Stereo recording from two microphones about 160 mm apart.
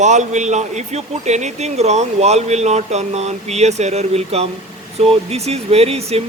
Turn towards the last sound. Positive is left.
turn(degrees=-40)  # may be behind; listen again after turning